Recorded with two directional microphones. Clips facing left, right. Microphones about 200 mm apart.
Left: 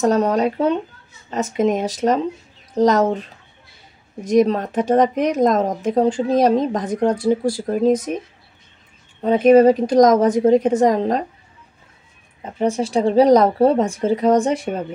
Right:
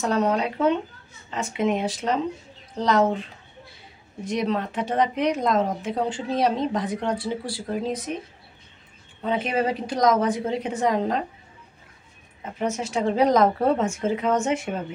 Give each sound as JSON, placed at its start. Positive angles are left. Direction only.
{"t": 0.0, "sound": "speech", "side_deg": 40}
{"t": 4.2, "sound": "speech", "side_deg": 45}
{"t": 9.2, "sound": "speech", "side_deg": 45}
{"t": 12.4, "sound": "speech", "side_deg": 30}